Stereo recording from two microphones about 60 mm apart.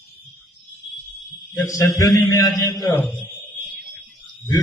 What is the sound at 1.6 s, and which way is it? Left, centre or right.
Speech, left.